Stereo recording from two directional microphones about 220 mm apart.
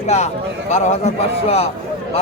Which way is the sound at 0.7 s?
30° left (ahead or behind).